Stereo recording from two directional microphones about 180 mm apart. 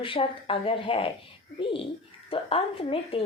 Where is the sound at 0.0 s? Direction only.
30° left (ahead or behind).